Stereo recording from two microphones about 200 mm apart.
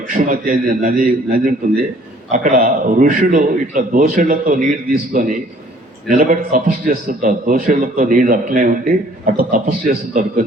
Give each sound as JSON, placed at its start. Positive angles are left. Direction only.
{"t": 0.1, "sound": "a man's voice", "side_deg": -45}